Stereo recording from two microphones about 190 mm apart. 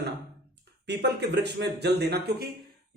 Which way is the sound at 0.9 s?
60° right (ahead or behind).